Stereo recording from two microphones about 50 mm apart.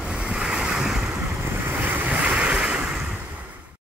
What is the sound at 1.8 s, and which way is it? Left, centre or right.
Waves, right.